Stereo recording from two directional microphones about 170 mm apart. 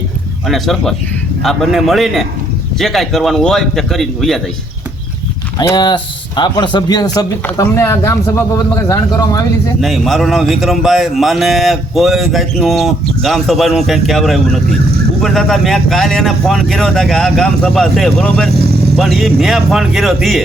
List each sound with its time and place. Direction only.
0.4 s a man's voice: centre (ahead or behind)
5.5 s a man's voice: 25° left (ahead or behind)
9.8 s a man's voice: centre (ahead or behind)